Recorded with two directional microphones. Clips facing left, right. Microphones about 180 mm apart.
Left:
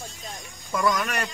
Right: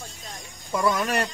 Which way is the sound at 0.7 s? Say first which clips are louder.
Right 1 dB; 25° right (ahead or behind).